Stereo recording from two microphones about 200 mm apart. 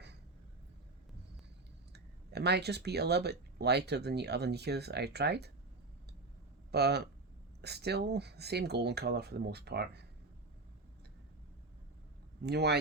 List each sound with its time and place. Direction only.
1.9 s speech: 55° right (ahead or behind)
6.7 s speech: 55° right (ahead or behind)
12.4 s speech: 55° right (ahead or behind)